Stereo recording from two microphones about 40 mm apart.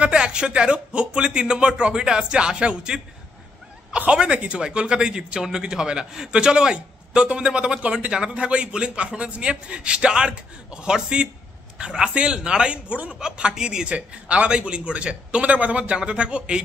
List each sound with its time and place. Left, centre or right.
0.0 s a man's voice: right
4.1 s a man's voice: right